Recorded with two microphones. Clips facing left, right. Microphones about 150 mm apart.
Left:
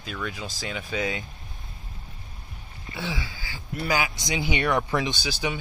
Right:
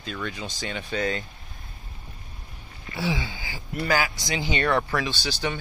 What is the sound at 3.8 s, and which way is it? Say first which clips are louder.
Speech: right 1 dB; 20° left (ahead or behind).